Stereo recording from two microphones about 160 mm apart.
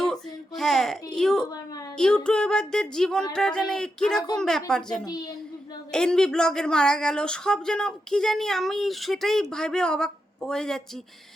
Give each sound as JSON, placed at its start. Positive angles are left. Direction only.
{"t": 0.0, "sound": "a sound", "side_deg": 5}
{"t": 2.0, "sound": "speech", "side_deg": 5}
{"t": 5.0, "sound": "a woman's voice", "side_deg": 25}
{"t": 5.9, "sound": "speech", "side_deg": 5}